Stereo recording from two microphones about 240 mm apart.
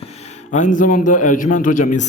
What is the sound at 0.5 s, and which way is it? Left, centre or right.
A man's voice, left.